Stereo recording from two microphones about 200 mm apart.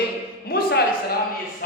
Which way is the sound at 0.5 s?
50° left (ahead or behind).